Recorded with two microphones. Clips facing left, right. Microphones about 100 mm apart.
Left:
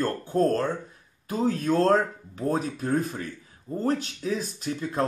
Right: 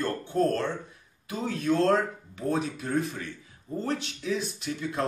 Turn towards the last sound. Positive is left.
turn(degrees=40)  # may be behind; listen again after turning